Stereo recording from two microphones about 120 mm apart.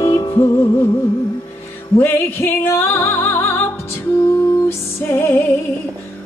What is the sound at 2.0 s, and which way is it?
Music, 20° left (ahead or behind).